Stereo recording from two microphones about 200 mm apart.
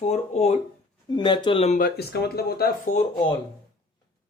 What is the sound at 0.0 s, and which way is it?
Speech, 30° left (ahead or behind).